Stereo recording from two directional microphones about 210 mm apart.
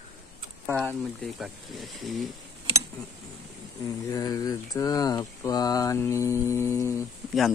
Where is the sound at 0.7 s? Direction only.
10° right (ahead or behind).